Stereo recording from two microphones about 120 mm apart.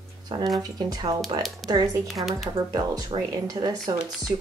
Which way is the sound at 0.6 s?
35° right (ahead or behind).